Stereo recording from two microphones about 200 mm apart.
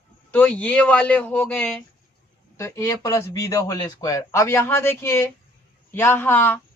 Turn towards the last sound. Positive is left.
turn(degrees=10)  # may be behind; listen again after turning